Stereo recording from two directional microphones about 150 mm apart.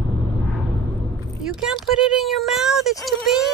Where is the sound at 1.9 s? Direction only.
Centre (ahead or behind).